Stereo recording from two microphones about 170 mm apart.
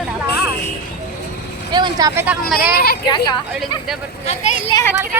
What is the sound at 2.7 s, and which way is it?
Speech, 65° left (ahead or behind).